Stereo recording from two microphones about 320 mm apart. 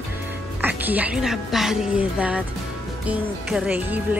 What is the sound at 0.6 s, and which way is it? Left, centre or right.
Speech, centre.